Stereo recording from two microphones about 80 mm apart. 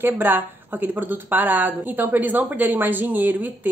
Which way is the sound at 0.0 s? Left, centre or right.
Right.